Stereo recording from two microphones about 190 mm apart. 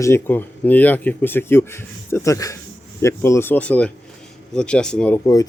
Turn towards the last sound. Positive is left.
turn(degrees=5)  # may be behind; listen again after turning